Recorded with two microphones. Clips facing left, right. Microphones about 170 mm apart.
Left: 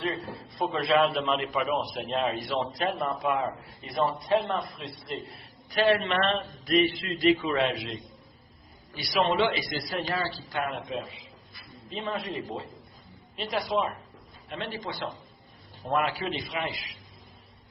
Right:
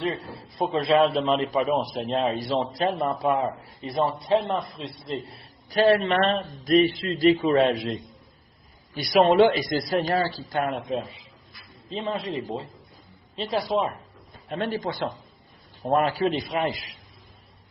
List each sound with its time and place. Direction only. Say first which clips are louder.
0.3 s a man's voice: right 3 dB; 30° right (ahead or behind)
9.0 s a man's voice: right 8 dB; 45° right (ahead or behind)
11.9 s a man's voice: right 4 dB; 30° right (ahead or behind)
14.5 s a man's voice: right 7 dB; 45° right (ahead or behind)